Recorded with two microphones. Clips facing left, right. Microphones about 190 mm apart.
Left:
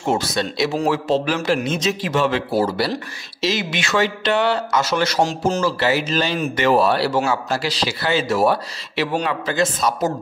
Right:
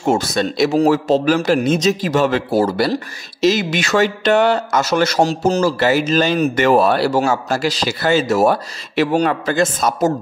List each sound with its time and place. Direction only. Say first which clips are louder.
0.0 s a man's voice: right 4 dB; 50° right (ahead or behind)